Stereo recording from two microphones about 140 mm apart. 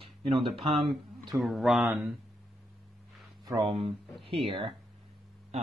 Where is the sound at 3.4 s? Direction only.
30° right (ahead or behind).